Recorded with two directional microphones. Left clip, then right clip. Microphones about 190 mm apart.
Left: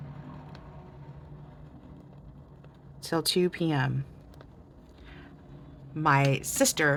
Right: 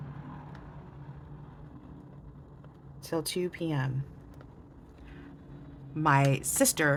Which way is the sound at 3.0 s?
35° left (ahead or behind).